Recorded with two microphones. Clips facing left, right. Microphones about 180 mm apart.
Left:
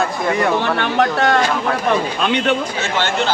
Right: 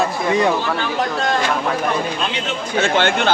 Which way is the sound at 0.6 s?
65° left (ahead or behind).